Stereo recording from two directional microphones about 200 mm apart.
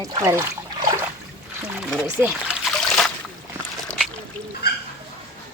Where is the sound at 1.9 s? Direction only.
5° right (ahead or behind).